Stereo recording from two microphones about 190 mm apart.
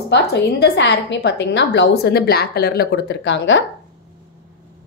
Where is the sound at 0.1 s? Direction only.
65° left (ahead or behind).